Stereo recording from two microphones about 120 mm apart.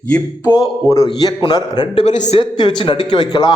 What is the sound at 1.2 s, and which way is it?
Speech, 35° left (ahead or behind).